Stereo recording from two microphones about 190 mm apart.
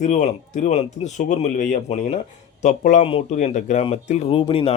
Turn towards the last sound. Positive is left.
turn(degrees=30)  # may be behind; listen again after turning